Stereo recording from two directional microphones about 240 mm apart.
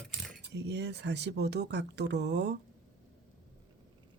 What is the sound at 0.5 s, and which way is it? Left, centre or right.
Speech, right.